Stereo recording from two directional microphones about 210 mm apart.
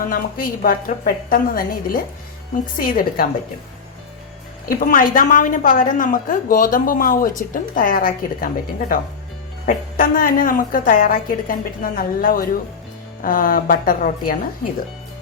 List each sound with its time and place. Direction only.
0.0 s a woman's voice: 40° left (ahead or behind)
4.8 s a woman's voice: 40° left (ahead or behind)